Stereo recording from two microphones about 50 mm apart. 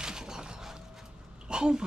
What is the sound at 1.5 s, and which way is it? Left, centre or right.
Speech, centre.